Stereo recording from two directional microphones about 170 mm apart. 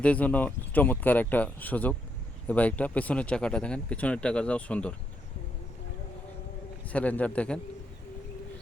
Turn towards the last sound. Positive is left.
turn(degrees=5)  # may be behind; listen again after turning